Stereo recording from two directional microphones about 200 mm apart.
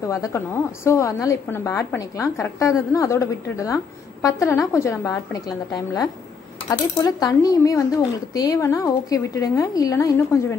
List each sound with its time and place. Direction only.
0.1 s a woman's voice: 15° left (ahead or behind)